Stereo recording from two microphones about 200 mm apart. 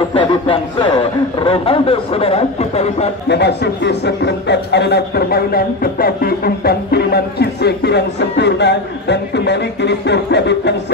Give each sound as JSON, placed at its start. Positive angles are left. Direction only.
{"t": 0.1, "sound": "speech", "side_deg": 25}
{"t": 3.3, "sound": "speech", "side_deg": 55}